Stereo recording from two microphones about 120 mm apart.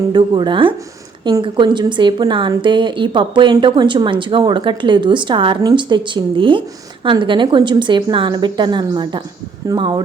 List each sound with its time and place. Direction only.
0.1 s a woman's voice: 40° right (ahead or behind)